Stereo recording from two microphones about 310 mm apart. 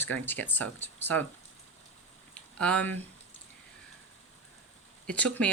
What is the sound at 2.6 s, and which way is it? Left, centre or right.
Speech, centre.